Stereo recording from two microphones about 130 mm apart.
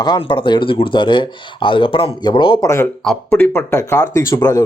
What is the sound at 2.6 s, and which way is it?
A man's voice, 20° left (ahead or behind).